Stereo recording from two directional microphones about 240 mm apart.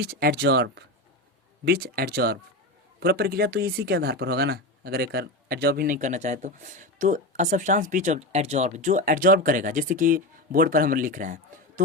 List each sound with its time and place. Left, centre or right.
0.0 s speech: right